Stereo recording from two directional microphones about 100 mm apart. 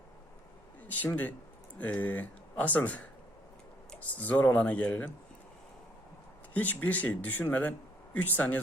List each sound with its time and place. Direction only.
1.0 s speech: 15° left (ahead or behind)
4.0 s speech: 15° left (ahead or behind)
6.5 s speech: 15° left (ahead or behind)